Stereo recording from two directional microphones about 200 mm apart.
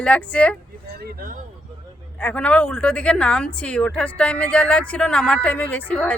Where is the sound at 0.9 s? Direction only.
50° right (ahead or behind).